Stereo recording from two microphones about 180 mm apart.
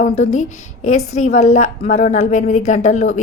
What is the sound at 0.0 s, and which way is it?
A woman's voice, 40° left (ahead or behind).